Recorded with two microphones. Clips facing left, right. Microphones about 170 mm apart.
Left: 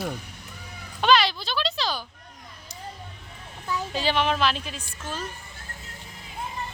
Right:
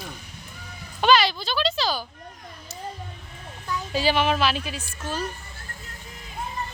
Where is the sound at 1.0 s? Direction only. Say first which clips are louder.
Right 1 dB; centre (ahead or behind).